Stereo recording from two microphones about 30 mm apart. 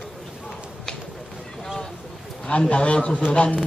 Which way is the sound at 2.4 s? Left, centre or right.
Left.